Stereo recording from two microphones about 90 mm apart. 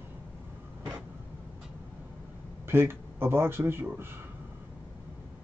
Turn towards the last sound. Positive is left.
turn(degrees=-25)  # may be behind; listen again after turning